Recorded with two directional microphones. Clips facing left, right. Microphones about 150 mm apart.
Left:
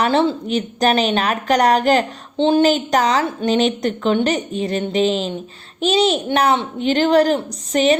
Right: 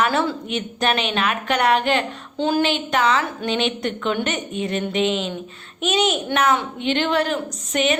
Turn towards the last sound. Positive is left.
turn(degrees=35)  # may be behind; listen again after turning